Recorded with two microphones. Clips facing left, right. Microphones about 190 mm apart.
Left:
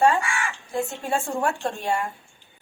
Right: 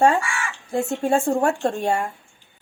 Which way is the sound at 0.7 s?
50° right (ahead or behind).